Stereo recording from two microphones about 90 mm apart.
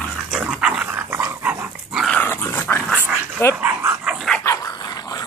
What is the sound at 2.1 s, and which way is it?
Dog, 20° left (ahead or behind).